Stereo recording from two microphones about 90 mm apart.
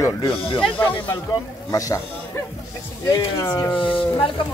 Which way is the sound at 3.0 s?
35° left (ahead or behind).